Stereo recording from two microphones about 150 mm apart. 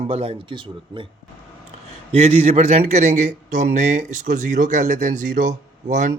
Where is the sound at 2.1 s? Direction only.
40° right (ahead or behind).